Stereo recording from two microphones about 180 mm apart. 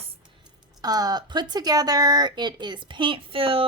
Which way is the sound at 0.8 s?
20° right (ahead or behind).